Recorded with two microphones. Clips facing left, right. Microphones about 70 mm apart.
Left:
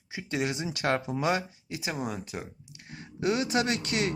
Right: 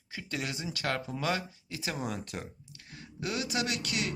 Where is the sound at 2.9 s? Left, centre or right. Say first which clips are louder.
Left 7 dB; left.